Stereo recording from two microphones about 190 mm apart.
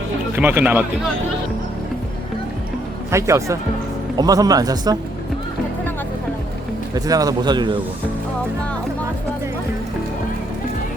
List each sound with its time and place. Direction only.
0.3 s speech: 10° right (ahead or behind)
3.1 s speech: 15° right (ahead or behind)
6.9 s speech: 20° right (ahead or behind)